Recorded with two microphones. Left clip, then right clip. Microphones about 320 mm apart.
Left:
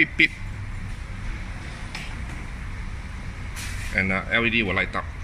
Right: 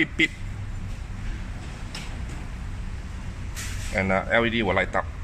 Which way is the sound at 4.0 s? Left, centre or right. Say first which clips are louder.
Right 1 dB; centre.